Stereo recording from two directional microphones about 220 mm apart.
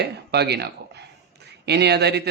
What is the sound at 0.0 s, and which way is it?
Speech, 50° right (ahead or behind).